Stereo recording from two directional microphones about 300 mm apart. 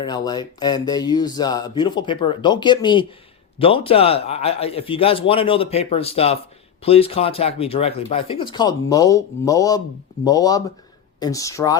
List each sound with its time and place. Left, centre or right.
0.0 s speech: centre